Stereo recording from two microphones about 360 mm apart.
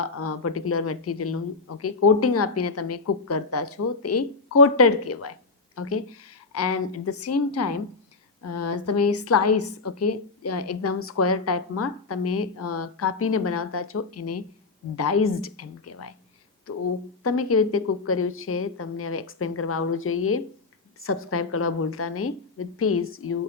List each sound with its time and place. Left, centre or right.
0.0 s a woman's voice: left
17.2 s a woman's voice: left